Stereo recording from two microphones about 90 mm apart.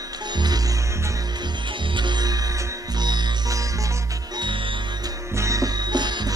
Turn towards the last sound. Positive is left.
turn(degrees=-55)  # may be behind; listen again after turning